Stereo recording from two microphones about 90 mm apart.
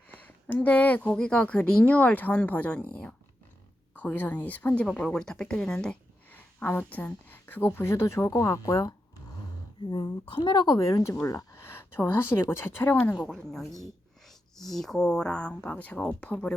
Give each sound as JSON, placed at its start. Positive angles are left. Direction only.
{"t": 0.1, "sound": "a sound", "side_deg": 20}
{"t": 1.1, "sound": "speech", "side_deg": 10}
{"t": 6.3, "sound": "speech", "side_deg": 20}
{"t": 9.8, "sound": "a woman's voice", "side_deg": 60}
{"t": 10.8, "sound": "speech", "side_deg": 35}
{"t": 13.2, "sound": "a woman's voice", "side_deg": 0}